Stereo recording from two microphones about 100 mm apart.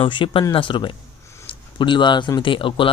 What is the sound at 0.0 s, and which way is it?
Speech, 55° left (ahead or behind).